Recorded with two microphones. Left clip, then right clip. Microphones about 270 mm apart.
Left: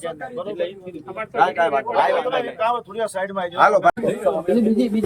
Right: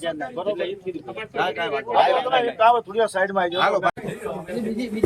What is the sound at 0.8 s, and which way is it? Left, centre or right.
Speech, centre.